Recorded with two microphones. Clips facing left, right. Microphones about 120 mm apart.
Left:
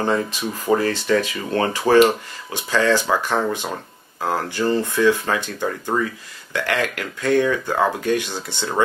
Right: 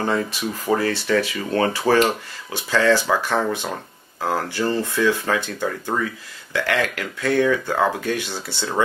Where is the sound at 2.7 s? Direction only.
15° left (ahead or behind).